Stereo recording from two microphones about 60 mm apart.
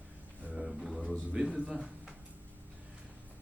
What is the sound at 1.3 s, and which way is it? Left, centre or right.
Speech, centre.